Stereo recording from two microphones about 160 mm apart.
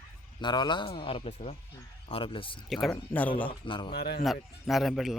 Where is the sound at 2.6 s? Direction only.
Centre (ahead or behind).